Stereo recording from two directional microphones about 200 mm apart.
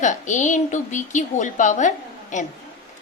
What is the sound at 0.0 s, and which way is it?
A woman's voice, 40° left (ahead or behind).